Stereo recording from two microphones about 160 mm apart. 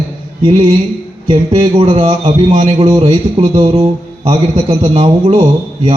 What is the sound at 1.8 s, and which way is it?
A man's voice, 35° right (ahead or behind).